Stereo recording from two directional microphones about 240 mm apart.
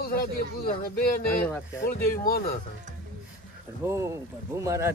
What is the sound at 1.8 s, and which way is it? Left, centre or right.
Speech, left.